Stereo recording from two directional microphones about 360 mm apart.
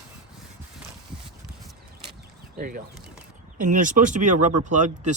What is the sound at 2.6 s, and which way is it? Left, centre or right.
A man's voice, right.